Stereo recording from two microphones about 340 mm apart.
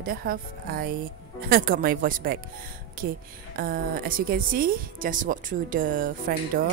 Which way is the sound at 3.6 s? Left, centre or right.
Right.